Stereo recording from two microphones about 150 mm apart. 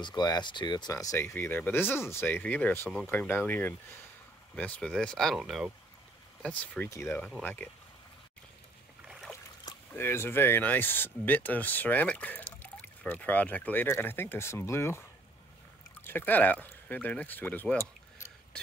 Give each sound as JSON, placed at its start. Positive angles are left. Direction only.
{"t": 0.0, "sound": "speech", "side_deg": 25}
{"t": 6.6, "sound": "speech", "side_deg": 10}
{"t": 9.0, "sound": "boat", "side_deg": -5}
{"t": 9.7, "sound": "speech", "side_deg": 15}